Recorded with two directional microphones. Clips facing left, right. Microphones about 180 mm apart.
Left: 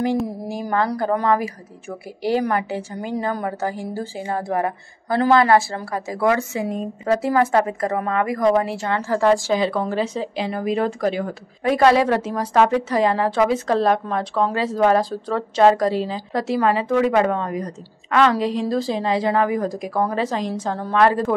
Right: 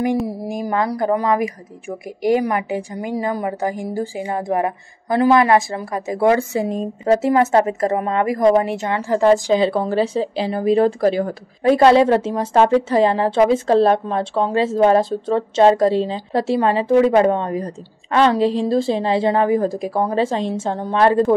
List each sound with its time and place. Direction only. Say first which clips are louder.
0.5 s a woman's voice: right 1 dB; 15° right (ahead or behind)